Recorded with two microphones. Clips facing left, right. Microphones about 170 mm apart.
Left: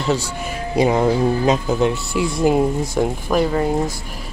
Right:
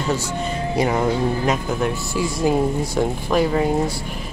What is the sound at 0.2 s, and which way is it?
Speech, 15° left (ahead or behind).